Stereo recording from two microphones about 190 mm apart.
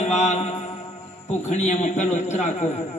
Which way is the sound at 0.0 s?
35° left (ahead or behind).